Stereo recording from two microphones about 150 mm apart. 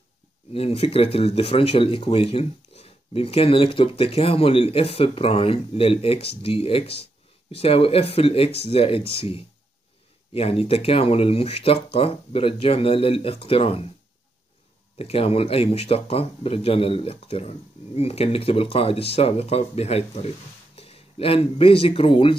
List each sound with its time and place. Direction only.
0.5 s speech: 40° left (ahead or behind)
15.0 s speech: 40° left (ahead or behind)